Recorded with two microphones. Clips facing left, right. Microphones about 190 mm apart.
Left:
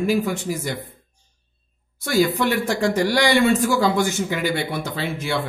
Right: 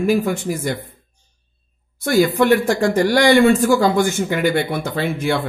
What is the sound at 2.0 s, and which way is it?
Speech, 55° right (ahead or behind).